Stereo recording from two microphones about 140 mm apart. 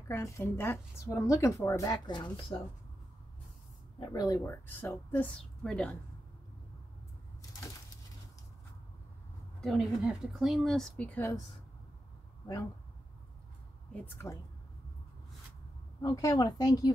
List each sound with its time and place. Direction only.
0.1 s a woman's voice: 15° left (ahead or behind); by 2.3 s 30° left (ahead or behind)
4.0 s a woman's voice: 30° left (ahead or behind)
4.4 s a woman's voice: 15° left (ahead or behind)
9.6 s a woman's voice: centre (ahead or behind)
13.9 s a woman's voice: 15° left (ahead or behind)
16.0 s a woman's voice: 25° left (ahead or behind)